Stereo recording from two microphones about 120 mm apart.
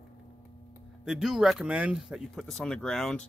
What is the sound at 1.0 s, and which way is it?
Speech, 5° right (ahead or behind).